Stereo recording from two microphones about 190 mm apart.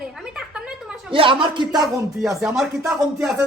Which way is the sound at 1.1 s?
25° right (ahead or behind).